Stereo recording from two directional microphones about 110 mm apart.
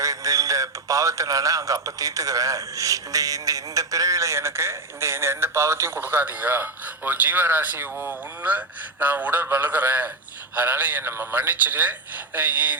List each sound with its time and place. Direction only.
0.0 s a man's voice: 30° right (ahead or behind); by 12.7 s 15° right (ahead or behind)